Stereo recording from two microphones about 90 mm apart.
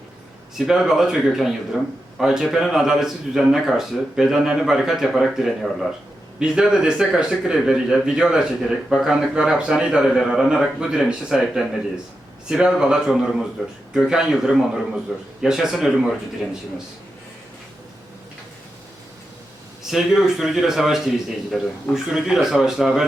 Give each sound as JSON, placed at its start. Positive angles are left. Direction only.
{"t": 0.6, "sound": "a man's voice", "side_deg": -5}
{"t": 19.8, "sound": "a man's voice", "side_deg": -5}